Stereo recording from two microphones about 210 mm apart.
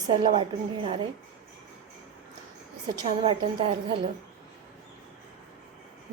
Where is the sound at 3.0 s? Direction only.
30° right (ahead or behind).